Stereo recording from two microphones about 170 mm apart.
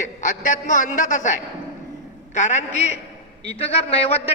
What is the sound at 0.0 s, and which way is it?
A man's voice, 50° left (ahead or behind).